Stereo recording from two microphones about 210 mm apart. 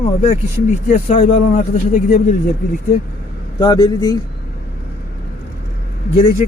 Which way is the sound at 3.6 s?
20° left (ahead or behind).